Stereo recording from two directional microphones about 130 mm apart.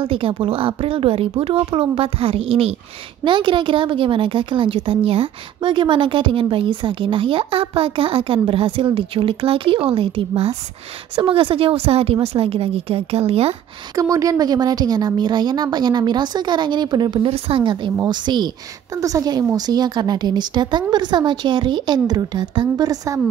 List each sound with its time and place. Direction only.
0.0 s speech: 45° right (ahead or behind)
3.3 s a woman's voice: 40° right (ahead or behind)
13.9 s a woman's voice: 25° right (ahead or behind)